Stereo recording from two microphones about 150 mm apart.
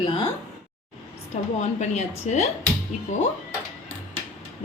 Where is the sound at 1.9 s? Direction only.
50° left (ahead or behind).